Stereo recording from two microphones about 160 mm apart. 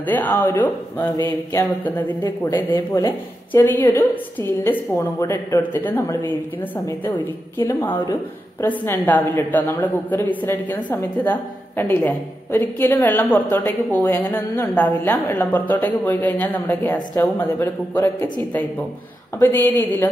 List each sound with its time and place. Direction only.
0.0 s a woman's voice: 10° left (ahead or behind)
11.2 s a woman's voice: 15° left (ahead or behind)